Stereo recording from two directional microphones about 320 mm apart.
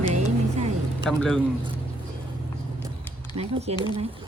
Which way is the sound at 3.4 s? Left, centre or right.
Centre.